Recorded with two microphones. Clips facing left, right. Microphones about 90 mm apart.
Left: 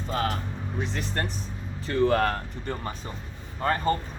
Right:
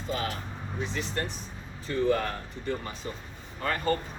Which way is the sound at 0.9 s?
55° left (ahead or behind).